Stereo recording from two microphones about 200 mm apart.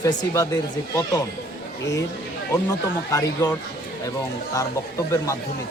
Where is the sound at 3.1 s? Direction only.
15° left (ahead or behind).